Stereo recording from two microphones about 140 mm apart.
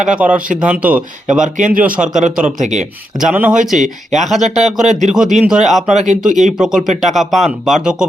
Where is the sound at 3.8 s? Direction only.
55° right (ahead or behind).